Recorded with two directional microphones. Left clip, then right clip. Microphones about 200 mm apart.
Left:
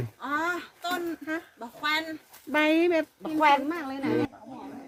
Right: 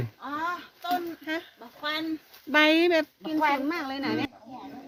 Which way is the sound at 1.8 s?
50° left (ahead or behind).